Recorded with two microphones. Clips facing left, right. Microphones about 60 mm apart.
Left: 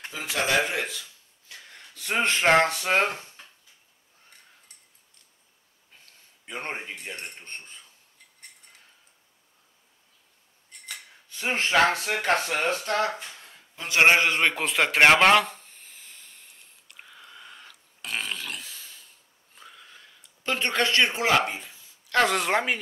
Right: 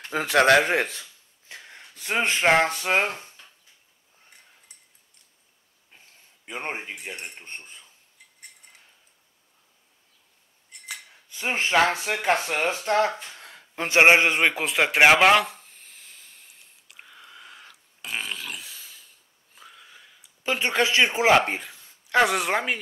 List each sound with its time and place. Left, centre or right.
0.1 s speech: right
0.7 s speech: right
1.5 s a sound: right
2.0 s speech: centre
6.4 s speech: centre
10.7 s speech: centre
12.8 s a man's voice: right
14.4 s a sound: centre
22.1 s speech: centre